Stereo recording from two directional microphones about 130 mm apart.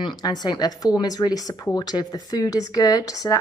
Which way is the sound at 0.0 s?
30° left (ahead or behind).